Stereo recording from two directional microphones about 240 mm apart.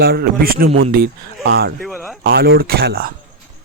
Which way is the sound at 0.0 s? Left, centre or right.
Right.